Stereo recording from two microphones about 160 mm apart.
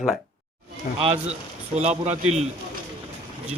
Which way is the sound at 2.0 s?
40° right (ahead or behind).